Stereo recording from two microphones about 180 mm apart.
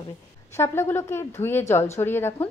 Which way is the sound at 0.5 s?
15° left (ahead or behind).